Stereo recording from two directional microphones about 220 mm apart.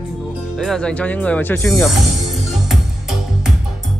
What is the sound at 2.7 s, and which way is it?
Music, centre (ahead or behind).